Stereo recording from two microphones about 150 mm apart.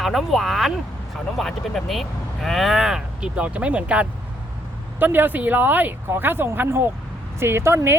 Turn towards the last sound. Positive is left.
turn(degrees=-20)  # may be behind; listen again after turning